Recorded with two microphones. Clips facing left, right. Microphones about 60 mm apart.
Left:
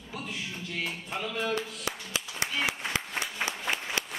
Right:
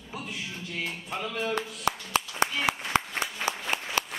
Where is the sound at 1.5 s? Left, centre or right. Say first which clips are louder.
Right 4 dB; right.